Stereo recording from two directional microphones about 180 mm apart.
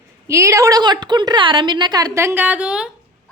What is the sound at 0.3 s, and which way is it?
A woman's voice, 15° right (ahead or behind).